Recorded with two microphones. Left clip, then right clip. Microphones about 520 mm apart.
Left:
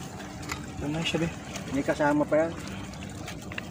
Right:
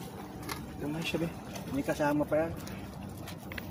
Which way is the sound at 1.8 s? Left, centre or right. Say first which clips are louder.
Left 5 dB; right.